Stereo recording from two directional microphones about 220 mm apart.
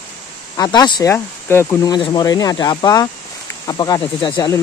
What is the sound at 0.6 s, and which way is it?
Speech, 20° left (ahead or behind).